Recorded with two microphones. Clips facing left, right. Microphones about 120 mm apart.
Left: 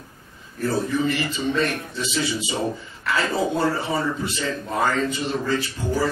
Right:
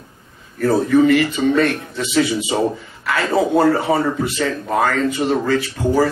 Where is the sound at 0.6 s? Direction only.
70° right (ahead or behind).